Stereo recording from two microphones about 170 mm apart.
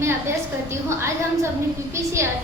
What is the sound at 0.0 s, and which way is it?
Speech, 15° right (ahead or behind).